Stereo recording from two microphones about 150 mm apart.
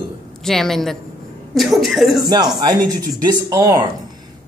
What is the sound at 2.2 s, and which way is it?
Speech, 30° right (ahead or behind).